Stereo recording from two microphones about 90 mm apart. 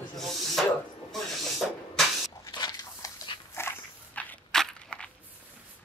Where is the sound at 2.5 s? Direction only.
50° left (ahead or behind).